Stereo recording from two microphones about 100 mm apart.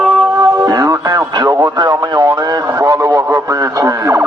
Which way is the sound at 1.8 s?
50° right (ahead or behind).